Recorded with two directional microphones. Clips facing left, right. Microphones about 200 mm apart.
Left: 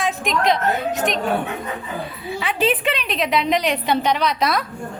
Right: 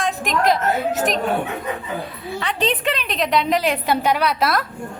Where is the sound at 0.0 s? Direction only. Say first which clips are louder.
Right 1 dB; centre (ahead or behind).